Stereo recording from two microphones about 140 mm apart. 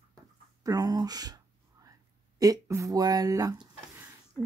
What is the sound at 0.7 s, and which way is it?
Speech, 25° right (ahead or behind).